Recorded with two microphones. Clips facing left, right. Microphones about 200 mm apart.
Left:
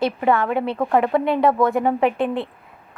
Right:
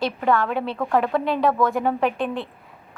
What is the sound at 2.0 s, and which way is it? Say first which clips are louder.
Speech: left 3 dB; 60° left (ahead or behind).